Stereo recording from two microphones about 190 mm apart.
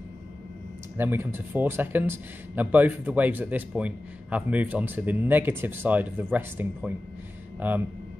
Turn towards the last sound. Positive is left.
turn(degrees=-10)  # may be behind; listen again after turning